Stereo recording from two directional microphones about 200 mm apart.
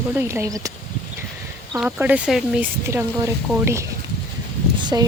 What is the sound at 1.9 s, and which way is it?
Speech, 10° right (ahead or behind).